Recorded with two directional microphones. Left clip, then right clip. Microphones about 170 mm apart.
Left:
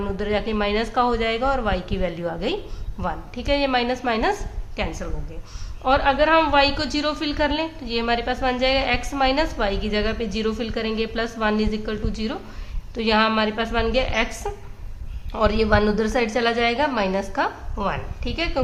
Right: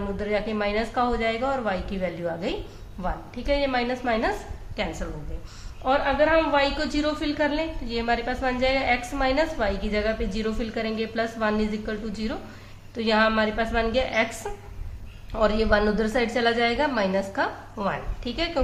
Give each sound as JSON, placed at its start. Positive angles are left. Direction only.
{"t": 0.2, "sound": "a woman's voice", "side_deg": 35}
{"t": 4.8, "sound": "speech", "side_deg": 20}
{"t": 5.8, "sound": "speech", "side_deg": 35}